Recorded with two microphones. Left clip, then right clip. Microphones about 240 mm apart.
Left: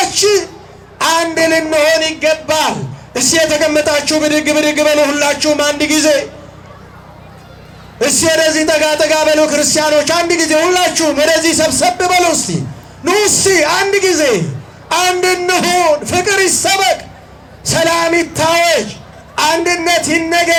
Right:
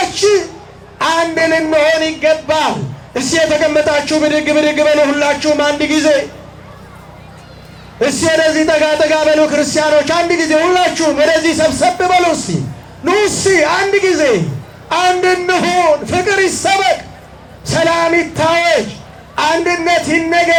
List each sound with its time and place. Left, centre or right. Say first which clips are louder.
0.0 s a sound: even; left
0.9 s a man's voice: left 1 dB; left
7.9 s a man's voice: even; left